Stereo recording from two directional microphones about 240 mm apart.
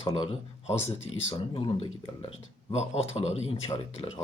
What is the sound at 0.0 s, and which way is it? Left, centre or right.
Speech, left.